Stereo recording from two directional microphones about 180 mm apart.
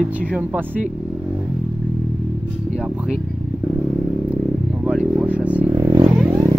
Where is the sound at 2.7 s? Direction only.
5° right (ahead or behind).